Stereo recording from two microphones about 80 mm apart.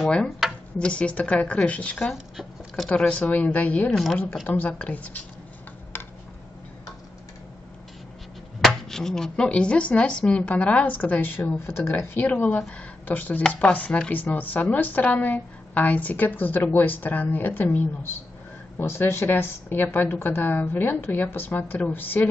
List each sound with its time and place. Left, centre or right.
0.4 s a sound: centre
0.7 s a woman's voice: centre
3.9 s a woman's voice: centre
4.5 s a woman's voice: left
5.9 s a sound: left
8.5 s a woman's voice: centre; by 22.3 s left